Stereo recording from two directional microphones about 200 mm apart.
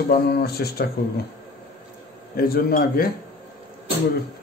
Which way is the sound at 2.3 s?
50° left (ahead or behind).